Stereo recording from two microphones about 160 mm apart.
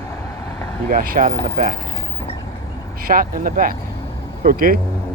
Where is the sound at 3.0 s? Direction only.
65° right (ahead or behind).